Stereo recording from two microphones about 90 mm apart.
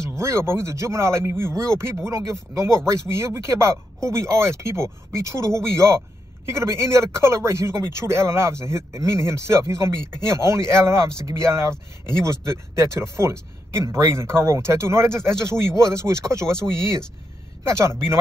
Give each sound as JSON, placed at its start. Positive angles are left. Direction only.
{"t": 0.1, "sound": "speech", "side_deg": -30}
{"t": 17.6, "sound": "speech", "side_deg": -35}